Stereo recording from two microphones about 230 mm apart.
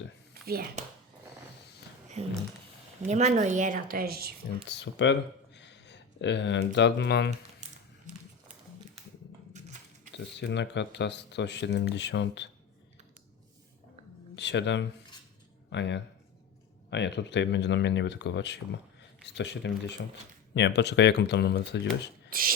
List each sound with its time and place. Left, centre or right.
0.4 s a woman's voice: right
2.2 s a woman's voice: right
4.7 s speech: left
10.3 s speech: left
14.3 s speech: left
22.3 s a sound: right